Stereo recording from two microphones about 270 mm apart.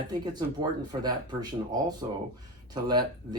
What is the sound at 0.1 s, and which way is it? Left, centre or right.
Speech, centre.